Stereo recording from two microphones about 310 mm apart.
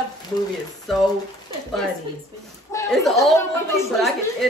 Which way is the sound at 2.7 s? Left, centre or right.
Centre.